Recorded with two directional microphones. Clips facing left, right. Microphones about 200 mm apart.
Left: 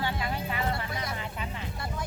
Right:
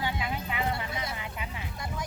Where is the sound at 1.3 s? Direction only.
10° right (ahead or behind).